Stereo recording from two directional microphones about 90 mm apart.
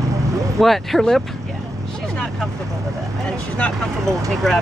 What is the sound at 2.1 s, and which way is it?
Vehicle, 5° left (ahead or behind).